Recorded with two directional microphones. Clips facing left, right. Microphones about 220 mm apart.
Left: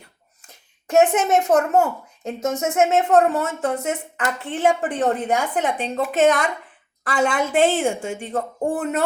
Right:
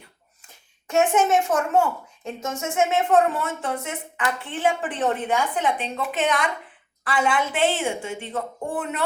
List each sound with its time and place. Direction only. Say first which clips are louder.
0.9 s a woman's voice: left 3 dB; 40° left (ahead or behind)